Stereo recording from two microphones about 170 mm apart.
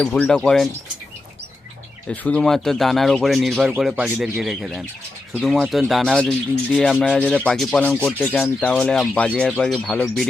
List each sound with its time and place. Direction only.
0.0 s speech: 5° left (ahead or behind)
2.0 s speech: 5° left (ahead or behind)